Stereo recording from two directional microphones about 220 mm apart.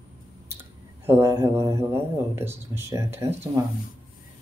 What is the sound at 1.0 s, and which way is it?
Speech, 10° right (ahead or behind).